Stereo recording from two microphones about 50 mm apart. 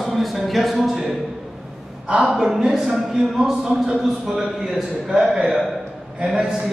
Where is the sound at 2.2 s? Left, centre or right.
Centre.